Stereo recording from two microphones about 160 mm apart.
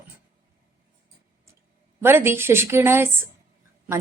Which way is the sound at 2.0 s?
15° right (ahead or behind).